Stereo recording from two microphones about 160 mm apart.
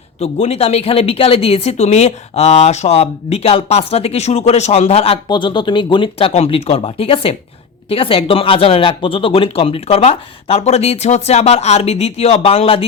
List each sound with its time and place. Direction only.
0.2 s speech: 40° left (ahead or behind)